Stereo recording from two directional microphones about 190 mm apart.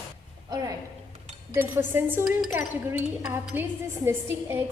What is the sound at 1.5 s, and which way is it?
A woman's voice, 10° right (ahead or behind).